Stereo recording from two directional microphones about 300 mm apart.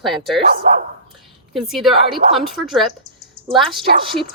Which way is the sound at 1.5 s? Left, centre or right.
Centre.